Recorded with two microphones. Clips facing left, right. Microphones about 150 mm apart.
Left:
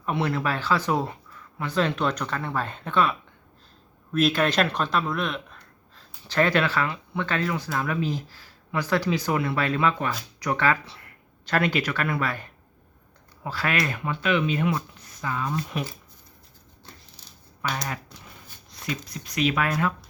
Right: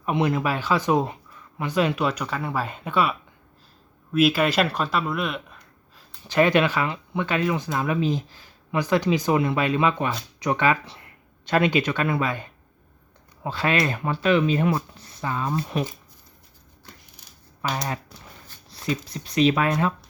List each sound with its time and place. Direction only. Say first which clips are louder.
0.0 s speech: right 3 dB; 15° right (ahead or behind)
5.5 s speech: even; 15° right (ahead or behind)
16.8 s a sound: even; 15° right (ahead or behind)
17.6 s speech: right 3 dB; 30° right (ahead or behind)